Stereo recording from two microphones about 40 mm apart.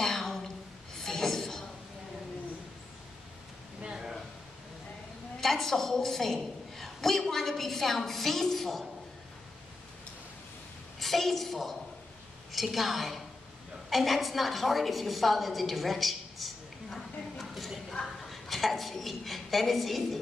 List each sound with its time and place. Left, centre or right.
0.0 s a sound: centre
5.4 s a woman's voice: centre
11.0 s a woman's voice: centre